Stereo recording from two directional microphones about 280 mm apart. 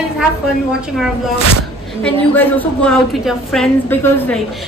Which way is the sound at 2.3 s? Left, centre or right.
Centre.